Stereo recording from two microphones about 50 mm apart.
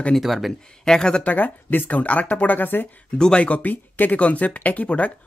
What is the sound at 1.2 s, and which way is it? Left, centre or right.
Speech, left.